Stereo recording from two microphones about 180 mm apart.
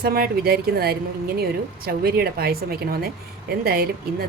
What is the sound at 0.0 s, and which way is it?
A woman's voice, 55° right (ahead or behind).